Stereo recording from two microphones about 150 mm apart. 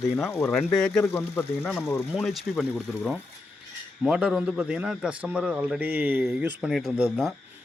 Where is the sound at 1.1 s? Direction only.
20° left (ahead or behind).